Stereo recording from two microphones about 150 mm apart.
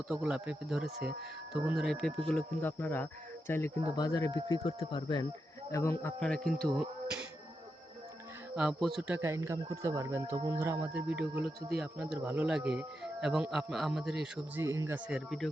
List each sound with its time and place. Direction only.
0.1 s speech: 5° right (ahead or behind); by 5.2 s 30° left (ahead or behind)
5.7 s speech: 20° left (ahead or behind)
6.1 s speech: 5° left (ahead or behind)
8.5 s speech: 5° right (ahead or behind)
14.6 s speech: 20° right (ahead or behind)
15.1 s speech: centre (ahead or behind)